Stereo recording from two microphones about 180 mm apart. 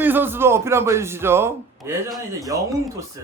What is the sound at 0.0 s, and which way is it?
Speech, 10° right (ahead or behind).